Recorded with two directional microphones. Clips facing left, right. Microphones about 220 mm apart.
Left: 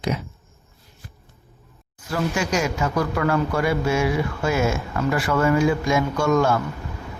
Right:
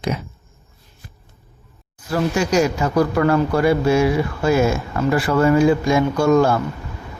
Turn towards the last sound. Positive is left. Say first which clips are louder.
# right 5 dB
turn(degrees=-35)  # may be behind; listen again after turning